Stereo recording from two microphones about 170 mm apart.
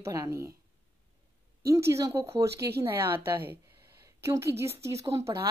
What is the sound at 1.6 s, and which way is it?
Speech, 15° right (ahead or behind).